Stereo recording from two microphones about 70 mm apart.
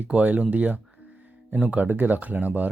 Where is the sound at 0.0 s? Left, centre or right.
Right.